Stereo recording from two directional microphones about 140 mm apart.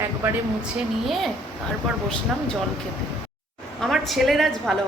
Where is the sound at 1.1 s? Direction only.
Centre (ahead or behind).